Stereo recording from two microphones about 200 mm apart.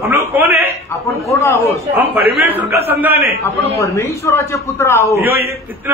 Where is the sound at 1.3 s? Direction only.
15° left (ahead or behind).